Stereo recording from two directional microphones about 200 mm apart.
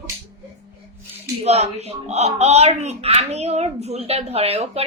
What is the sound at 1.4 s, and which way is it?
A woman's voice, 35° right (ahead or behind).